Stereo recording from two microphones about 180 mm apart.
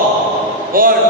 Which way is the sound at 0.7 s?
55° right (ahead or behind).